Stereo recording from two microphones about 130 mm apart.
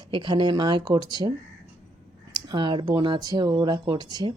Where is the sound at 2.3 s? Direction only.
35° right (ahead or behind).